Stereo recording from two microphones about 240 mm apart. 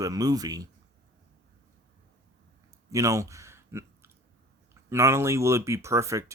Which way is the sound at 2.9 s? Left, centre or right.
Centre.